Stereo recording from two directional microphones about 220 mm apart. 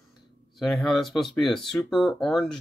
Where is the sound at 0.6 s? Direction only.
Centre (ahead or behind).